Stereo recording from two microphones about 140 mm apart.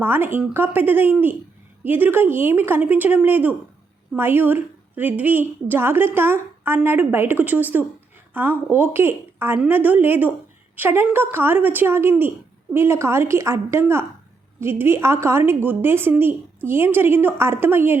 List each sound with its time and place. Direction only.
0.0 s a woman's voice: 15° right (ahead or behind)